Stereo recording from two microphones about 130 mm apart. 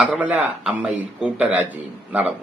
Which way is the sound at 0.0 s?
10° right (ahead or behind).